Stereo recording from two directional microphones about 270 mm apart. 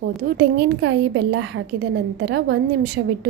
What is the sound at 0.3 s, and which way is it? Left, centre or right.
A woman's voice, right.